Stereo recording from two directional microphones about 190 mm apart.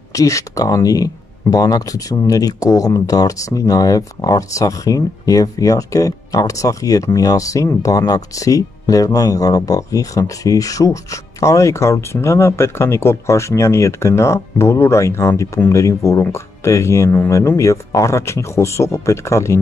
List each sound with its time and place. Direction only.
0.1 s speech: 15° left (ahead or behind)